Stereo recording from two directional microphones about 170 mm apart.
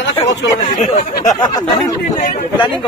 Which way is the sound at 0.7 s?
45° left (ahead or behind).